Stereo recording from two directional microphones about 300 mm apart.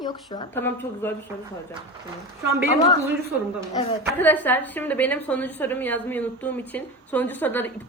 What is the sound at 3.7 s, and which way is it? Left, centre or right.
Speech, centre.